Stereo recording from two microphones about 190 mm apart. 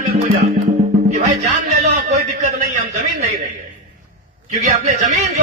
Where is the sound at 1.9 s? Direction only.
40° right (ahead or behind).